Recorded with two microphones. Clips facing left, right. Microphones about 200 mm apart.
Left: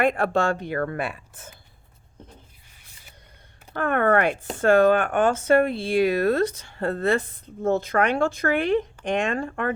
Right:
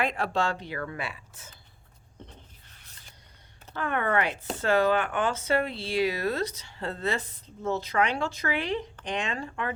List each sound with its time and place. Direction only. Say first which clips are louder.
0.0 s speech: left 6 dB; 50° left (ahead or behind)
2.6 s a sound: left 1 dB; 10° left (ahead or behind)
3.8 s speech: left 7 dB; 55° left (ahead or behind)